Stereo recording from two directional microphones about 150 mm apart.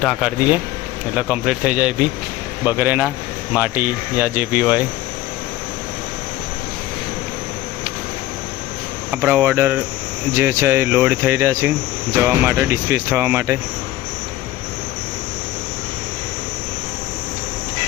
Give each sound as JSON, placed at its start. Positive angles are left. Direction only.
{"t": 0.0, "sound": "speech", "side_deg": -5}
{"t": 9.1, "sound": "speech", "side_deg": -10}